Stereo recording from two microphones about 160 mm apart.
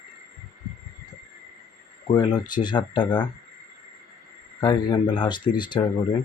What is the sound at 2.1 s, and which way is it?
Speech, 30° left (ahead or behind).